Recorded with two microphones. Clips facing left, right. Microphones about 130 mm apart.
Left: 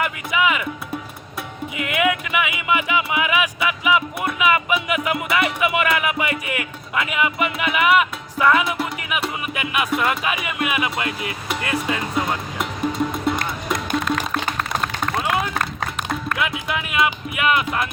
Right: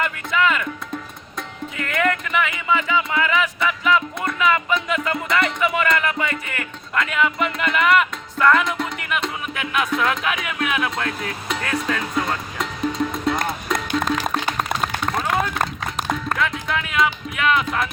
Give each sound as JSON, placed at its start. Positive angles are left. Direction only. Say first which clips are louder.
{"t": 0.0, "sound": "music", "louder": "even", "side_deg": 10}
{"t": 1.7, "sound": "music", "louder": "left 1 dB", "side_deg": 10}
{"t": 14.3, "sound": "music", "louder": "right 1 dB", "side_deg": -15}
{"t": 15.1, "sound": "run", "louder": "left 1 dB", "side_deg": 5}
{"t": 16.4, "sound": "speech", "louder": "right 1 dB", "side_deg": 5}